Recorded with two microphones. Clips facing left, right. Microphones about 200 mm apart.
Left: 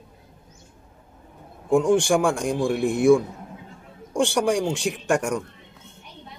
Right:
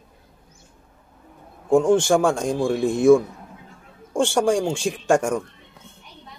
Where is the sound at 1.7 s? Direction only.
15° left (ahead or behind).